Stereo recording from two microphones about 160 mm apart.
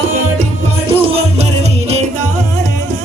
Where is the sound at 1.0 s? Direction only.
35° right (ahead or behind).